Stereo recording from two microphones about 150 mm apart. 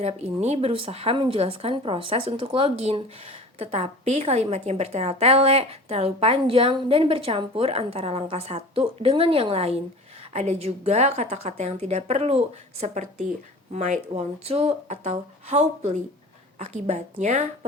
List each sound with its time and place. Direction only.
0.0 s a woman's voice: 45° right (ahead or behind)